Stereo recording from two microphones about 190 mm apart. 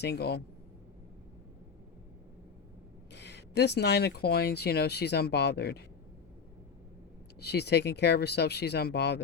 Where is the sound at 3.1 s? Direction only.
65° left (ahead or behind).